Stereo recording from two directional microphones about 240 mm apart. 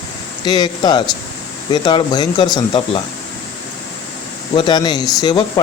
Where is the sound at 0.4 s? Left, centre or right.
Centre.